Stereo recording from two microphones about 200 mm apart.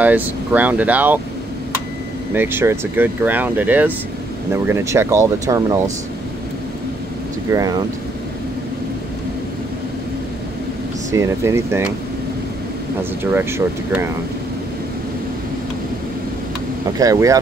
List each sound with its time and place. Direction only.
0.0 s speech: 10° right (ahead or behind)
2.3 s speech: 10° right (ahead or behind)
7.5 s speech: 20° right (ahead or behind)
11.1 s speech: 15° right (ahead or behind)
13.2 s speech: 10° right (ahead or behind)
17.0 s speech: 15° right (ahead or behind)